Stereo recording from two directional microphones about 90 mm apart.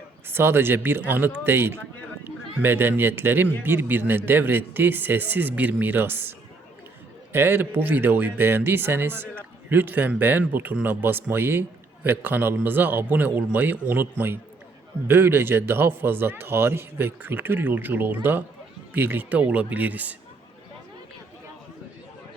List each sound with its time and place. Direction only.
0.3 s speech: 25° right (ahead or behind)
7.3 s speech: 25° right (ahead or behind)